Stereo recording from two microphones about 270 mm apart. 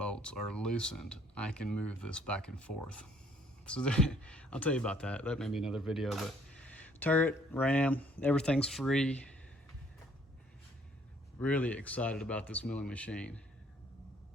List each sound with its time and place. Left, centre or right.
0.0 s speech: centre
11.3 s speech: centre